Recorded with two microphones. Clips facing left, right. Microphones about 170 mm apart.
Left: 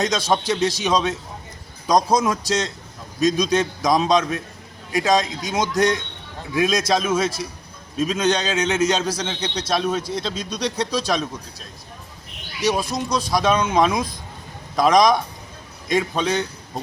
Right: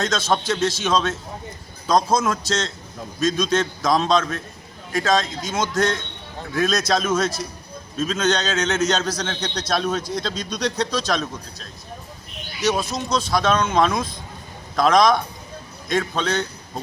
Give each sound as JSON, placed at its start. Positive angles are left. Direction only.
{"t": 0.0, "sound": "a man's voice", "side_deg": 15}
{"t": 12.6, "sound": "a man's voice", "side_deg": 10}